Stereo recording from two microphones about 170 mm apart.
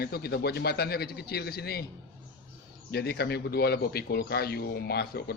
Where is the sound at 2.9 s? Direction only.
70° left (ahead or behind).